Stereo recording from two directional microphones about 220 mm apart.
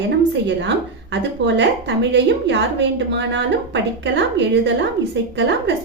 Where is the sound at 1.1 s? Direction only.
50° right (ahead or behind).